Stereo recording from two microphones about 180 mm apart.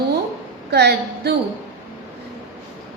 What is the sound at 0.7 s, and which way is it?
Speech, 65° right (ahead or behind).